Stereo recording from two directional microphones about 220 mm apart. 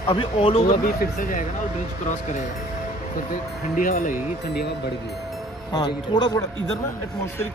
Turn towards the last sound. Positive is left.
turn(degrees=20)  # may be behind; listen again after turning